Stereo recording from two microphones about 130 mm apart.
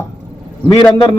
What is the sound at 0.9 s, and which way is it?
Speech, 35° left (ahead or behind).